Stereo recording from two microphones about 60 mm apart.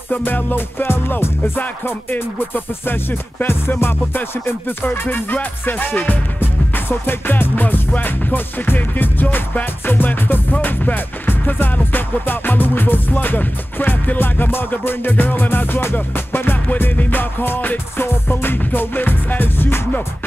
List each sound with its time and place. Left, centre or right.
0.1 s music: left